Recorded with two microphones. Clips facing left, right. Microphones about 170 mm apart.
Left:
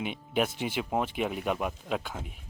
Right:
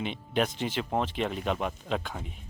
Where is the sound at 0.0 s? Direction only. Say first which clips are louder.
Even; 10° left (ahead or behind).